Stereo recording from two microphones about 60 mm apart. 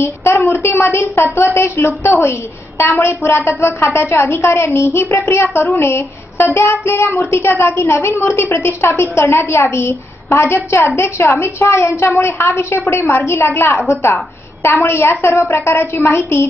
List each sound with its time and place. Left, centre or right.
0.0 s child singing: left
4.6 s child singing: left